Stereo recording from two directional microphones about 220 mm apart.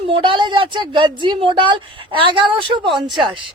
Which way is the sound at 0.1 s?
20° right (ahead or behind).